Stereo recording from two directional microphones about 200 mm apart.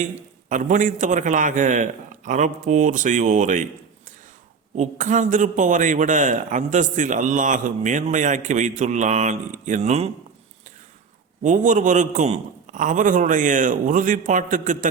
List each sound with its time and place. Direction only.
0.0 s a man's voice: 40° right (ahead or behind)
4.8 s a man's voice: 40° right (ahead or behind)
11.4 s a man's voice: 40° right (ahead or behind)